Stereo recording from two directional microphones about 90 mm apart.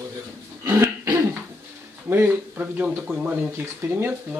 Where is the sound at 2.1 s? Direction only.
20° right (ahead or behind).